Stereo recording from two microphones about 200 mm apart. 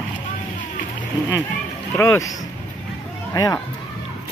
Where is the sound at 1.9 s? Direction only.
15° left (ahead or behind).